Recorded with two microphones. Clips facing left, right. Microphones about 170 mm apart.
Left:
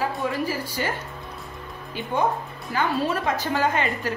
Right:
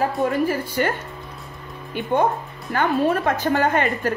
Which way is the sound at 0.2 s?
55° right (ahead or behind).